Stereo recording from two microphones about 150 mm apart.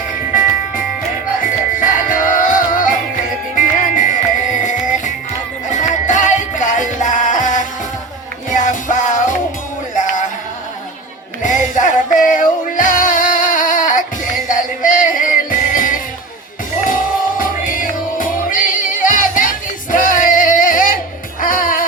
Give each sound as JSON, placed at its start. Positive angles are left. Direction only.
{"t": 1.4, "sound": "music", "side_deg": 65}
{"t": 11.4, "sound": "music", "side_deg": 60}